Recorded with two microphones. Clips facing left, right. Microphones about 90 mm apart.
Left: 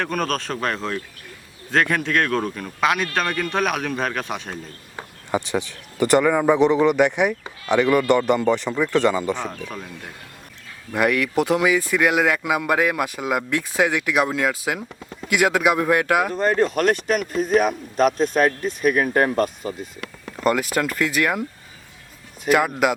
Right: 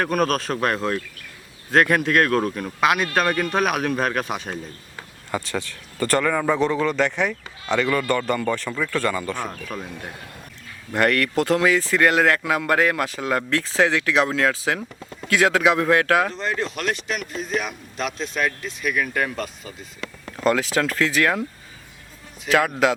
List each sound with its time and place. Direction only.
0.0 s speech: 5° right (ahead or behind)
5.3 s speech: 15° left (ahead or behind)
9.4 s speech: 5° right (ahead or behind)
10.9 s speech: 10° left (ahead or behind)
16.3 s a man's voice: 50° left (ahead or behind)
20.4 s speech: 5° left (ahead or behind)
22.4 s speech: 10° left (ahead or behind)